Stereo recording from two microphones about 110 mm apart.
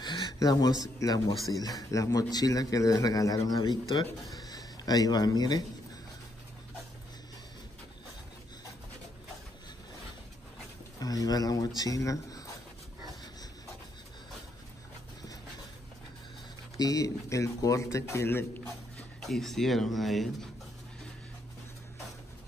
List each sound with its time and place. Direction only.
0.0 s a man's voice: 45° left (ahead or behind)
11.0 s a man's voice: 35° left (ahead or behind)
16.7 s speech: 35° left (ahead or behind)
19.2 s speech: centre (ahead or behind)